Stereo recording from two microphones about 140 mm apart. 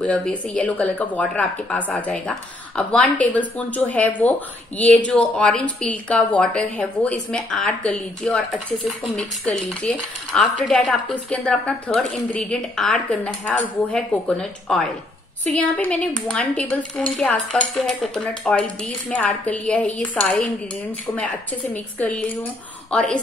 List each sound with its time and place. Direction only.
0.0 s speech: 10° left (ahead or behind)
9.1 s cutlery: 10° left (ahead or behind)
10.9 s speech: 5° left (ahead or behind)
13.9 s cutlery: 5° left (ahead or behind)
15.4 s speech: 10° left (ahead or behind)
21.1 s cutlery: centre (ahead or behind)
21.9 s speech: 10° left (ahead or behind)